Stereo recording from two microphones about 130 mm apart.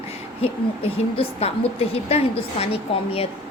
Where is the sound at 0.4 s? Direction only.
45° left (ahead or behind).